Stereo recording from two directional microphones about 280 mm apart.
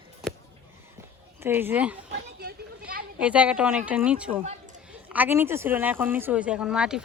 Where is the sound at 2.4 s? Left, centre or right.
Right.